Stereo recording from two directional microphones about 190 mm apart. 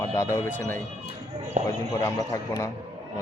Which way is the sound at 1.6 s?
35° right (ahead or behind).